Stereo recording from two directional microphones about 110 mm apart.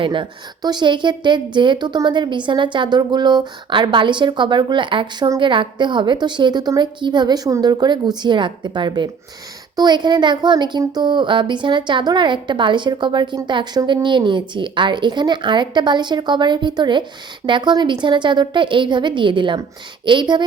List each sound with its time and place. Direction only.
0.0 s speech: 50° right (ahead or behind)